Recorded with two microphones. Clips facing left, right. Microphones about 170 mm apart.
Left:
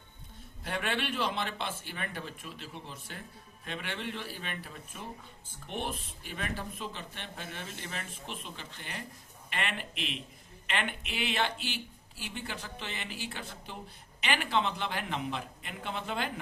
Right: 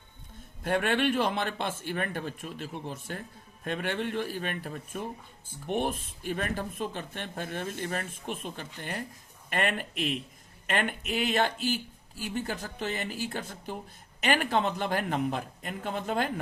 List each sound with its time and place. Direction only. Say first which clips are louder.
0.6 s speech: right 8 dB; 50° right (ahead or behind)